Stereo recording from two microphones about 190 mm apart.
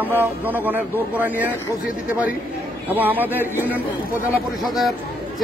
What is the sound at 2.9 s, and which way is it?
Speech, 10° right (ahead or behind).